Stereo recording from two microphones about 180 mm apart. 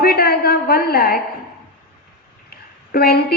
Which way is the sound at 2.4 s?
60° left (ahead or behind).